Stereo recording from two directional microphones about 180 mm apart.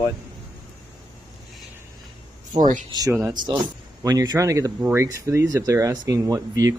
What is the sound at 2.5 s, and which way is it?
Speech, 45° right (ahead or behind).